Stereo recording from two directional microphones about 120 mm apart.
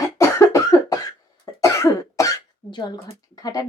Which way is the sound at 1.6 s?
25° left (ahead or behind).